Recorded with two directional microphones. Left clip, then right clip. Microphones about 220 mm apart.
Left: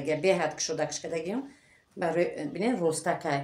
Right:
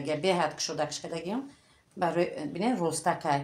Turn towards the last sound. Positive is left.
turn(degrees=-25)  # may be behind; listen again after turning